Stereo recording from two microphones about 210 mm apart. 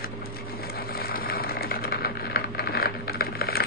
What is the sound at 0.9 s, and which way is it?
Vehicle, 45° left (ahead or behind).